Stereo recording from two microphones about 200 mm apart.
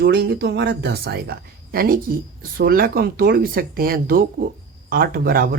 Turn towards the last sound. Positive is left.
turn(degrees=-50)  # may be behind; listen again after turning